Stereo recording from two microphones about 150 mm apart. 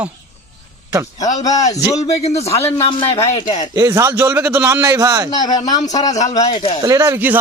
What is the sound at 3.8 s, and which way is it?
A man's voice, 20° right (ahead or behind).